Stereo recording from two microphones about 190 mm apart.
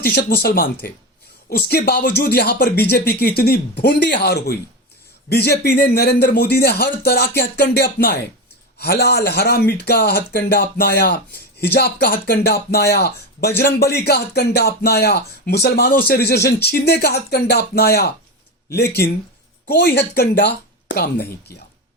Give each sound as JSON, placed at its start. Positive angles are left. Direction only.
{"t": 0.0, "sound": "a man's voice", "side_deg": 60}